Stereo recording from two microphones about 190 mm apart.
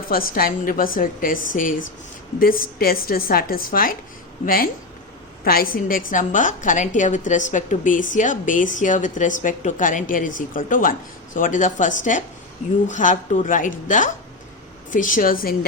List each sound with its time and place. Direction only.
0.1 s a woman's voice: 50° left (ahead or behind)